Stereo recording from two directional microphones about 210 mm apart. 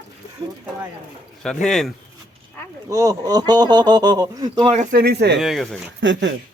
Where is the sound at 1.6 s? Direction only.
Centre (ahead or behind).